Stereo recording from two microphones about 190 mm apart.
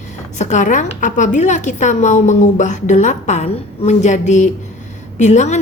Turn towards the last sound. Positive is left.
turn(degrees=35)  # may be behind; listen again after turning